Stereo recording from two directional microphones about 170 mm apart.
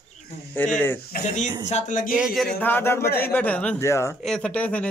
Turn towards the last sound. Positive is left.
turn(degrees=10)  # may be behind; listen again after turning